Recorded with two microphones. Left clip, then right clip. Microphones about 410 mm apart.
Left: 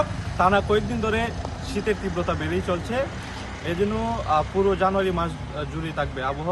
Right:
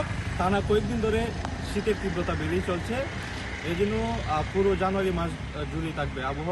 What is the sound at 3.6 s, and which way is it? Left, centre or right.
Speech, centre.